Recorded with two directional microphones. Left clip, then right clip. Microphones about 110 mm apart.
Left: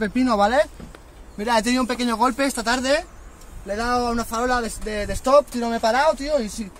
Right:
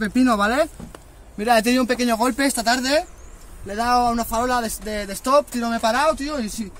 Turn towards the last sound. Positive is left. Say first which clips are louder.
# left 1 dB
turn(degrees=15)  # may be behind; listen again after turning